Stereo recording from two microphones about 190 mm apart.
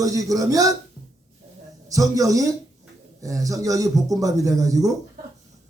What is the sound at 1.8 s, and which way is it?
Speech, 15° right (ahead or behind).